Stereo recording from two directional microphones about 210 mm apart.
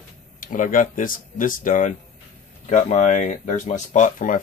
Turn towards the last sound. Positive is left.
turn(degrees=40)  # may be behind; listen again after turning